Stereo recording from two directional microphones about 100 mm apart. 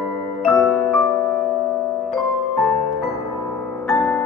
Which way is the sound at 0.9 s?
30° left (ahead or behind).